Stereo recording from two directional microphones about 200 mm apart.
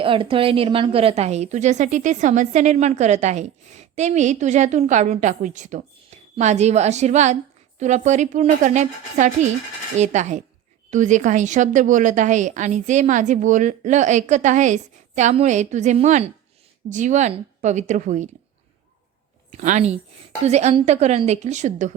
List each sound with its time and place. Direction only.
0.0 s a woman's voice: 25° right (ahead or behind)
19.5 s a woman's voice: 40° right (ahead or behind)